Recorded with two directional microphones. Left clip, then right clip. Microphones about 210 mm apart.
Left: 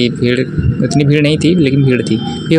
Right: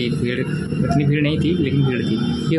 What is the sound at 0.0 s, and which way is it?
Speech, 30° left (ahead or behind).